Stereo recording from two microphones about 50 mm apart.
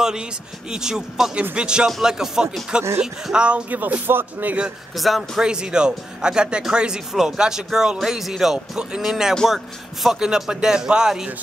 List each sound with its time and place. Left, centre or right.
0.7 s speech: centre
1.9 s speech: centre
3.7 s speech: right
4.9 s a man's voice: centre
5.4 s speech: centre